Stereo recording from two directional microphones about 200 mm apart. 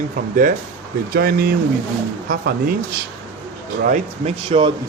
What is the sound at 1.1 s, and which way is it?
Speech, 50° right (ahead or behind).